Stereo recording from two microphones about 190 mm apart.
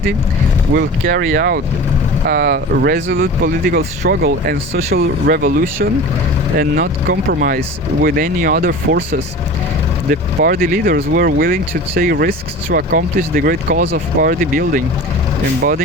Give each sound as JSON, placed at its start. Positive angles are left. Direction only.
{"t": 1.0, "sound": "speech", "side_deg": -50}
{"t": 10.1, "sound": "speech", "side_deg": -50}